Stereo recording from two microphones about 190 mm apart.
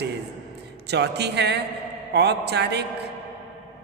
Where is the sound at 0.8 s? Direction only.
60° right (ahead or behind).